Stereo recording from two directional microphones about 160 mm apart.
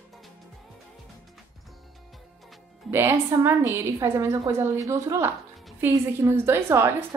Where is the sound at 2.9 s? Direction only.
15° right (ahead or behind).